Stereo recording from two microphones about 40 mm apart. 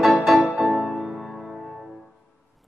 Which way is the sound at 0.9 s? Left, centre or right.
Centre.